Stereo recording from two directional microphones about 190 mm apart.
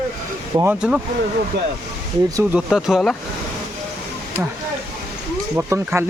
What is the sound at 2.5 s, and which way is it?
Speech, centre (ahead or behind).